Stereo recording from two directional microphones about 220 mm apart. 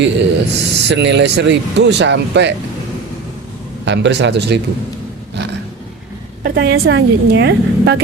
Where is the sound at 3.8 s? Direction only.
55° right (ahead or behind).